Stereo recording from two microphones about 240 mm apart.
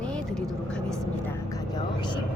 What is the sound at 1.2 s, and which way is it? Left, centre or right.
Speech, centre.